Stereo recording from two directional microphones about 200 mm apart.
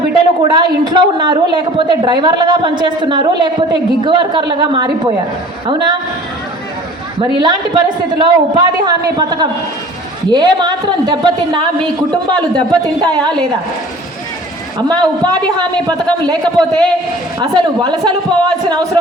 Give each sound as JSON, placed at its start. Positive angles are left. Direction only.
{"t": 0.4, "sound": "a woman's voice", "side_deg": -20}
{"t": 7.2, "sound": "a woman's voice", "side_deg": -20}
{"t": 14.8, "sound": "a woman's voice", "side_deg": -20}
{"t": 16.4, "sound": "a man's voice", "side_deg": 5}
{"t": 17.4, "sound": "a woman's voice", "side_deg": -20}